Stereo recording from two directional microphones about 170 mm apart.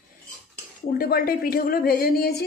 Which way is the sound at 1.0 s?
60° left (ahead or behind).